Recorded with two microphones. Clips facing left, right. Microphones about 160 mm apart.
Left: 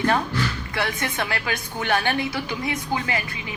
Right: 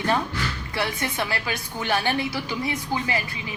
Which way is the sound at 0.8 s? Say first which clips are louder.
Even; 30° right (ahead or behind).